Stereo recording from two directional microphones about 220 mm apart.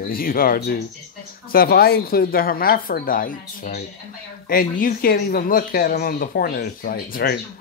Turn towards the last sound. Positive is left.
turn(degrees=45)  # may be behind; listen again after turning